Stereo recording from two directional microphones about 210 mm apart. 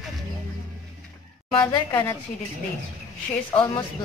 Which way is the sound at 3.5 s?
10° left (ahead or behind).